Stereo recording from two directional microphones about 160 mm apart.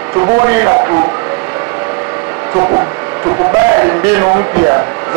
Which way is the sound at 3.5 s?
15° right (ahead or behind).